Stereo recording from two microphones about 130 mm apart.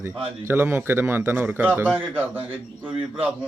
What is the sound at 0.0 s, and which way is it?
A man's voice, 15° right (ahead or behind).